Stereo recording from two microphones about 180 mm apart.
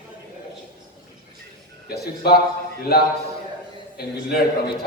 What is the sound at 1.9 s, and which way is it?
A man's voice, 60° left (ahead or behind).